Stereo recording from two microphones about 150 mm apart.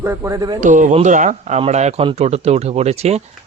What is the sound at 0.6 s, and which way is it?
Speech, 55° right (ahead or behind).